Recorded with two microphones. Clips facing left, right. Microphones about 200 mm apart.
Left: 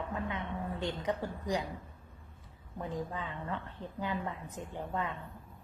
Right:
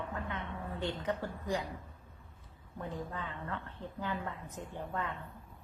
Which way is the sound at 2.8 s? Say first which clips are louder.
Left 3 dB; 15° left (ahead or behind).